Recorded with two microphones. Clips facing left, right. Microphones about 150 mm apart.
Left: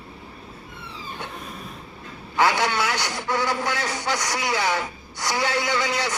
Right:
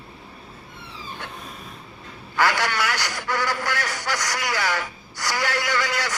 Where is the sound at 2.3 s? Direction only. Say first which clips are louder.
Left 2 dB; 20° left (ahead or behind).